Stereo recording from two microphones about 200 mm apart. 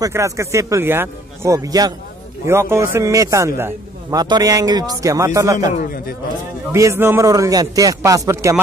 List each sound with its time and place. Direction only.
0.0 s a man's voice: 15° right (ahead or behind)
6.7 s a man's voice: 15° right (ahead or behind)